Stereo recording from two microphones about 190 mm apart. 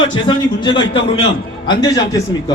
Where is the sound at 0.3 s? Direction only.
25° left (ahead or behind).